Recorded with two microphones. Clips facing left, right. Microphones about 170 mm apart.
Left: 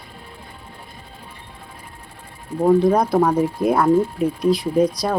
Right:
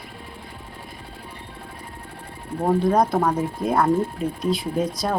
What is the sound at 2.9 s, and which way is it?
Speech, centre (ahead or behind).